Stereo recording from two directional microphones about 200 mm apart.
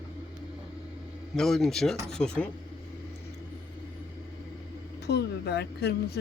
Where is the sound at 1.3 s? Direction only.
Centre (ahead or behind).